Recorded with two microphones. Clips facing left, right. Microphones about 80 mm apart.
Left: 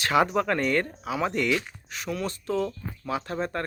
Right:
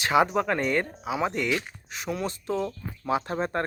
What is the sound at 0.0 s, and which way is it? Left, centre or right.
Speech, centre.